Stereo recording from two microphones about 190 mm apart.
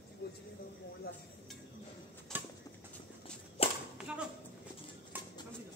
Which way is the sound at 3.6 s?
30° left (ahead or behind).